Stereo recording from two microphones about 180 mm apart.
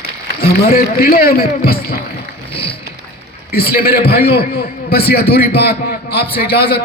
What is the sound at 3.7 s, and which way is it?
A man's voice, 60° left (ahead or behind).